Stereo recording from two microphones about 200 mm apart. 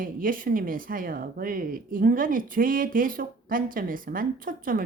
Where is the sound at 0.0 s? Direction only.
45° right (ahead or behind).